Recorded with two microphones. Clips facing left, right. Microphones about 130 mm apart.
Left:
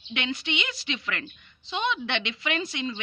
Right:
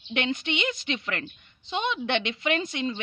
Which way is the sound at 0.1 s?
50° right (ahead or behind).